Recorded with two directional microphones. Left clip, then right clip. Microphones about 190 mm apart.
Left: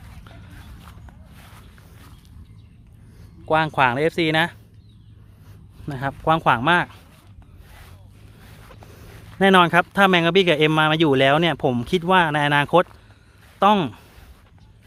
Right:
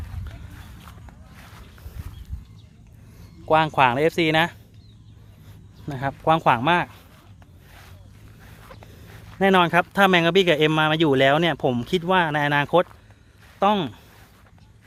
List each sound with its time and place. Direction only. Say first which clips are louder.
0.8 s walk: right 1 dB; centre (ahead or behind)
1.4 s walk: right 1 dB; 15° left (ahead or behind)
3.4 s speech: right 1 dB; centre (ahead or behind)
5.8 s speech: even; 5° left (ahead or behind)
7.7 s a sound: even; 15° left (ahead or behind)
9.1 s speech: left 3 dB; 15° left (ahead or behind)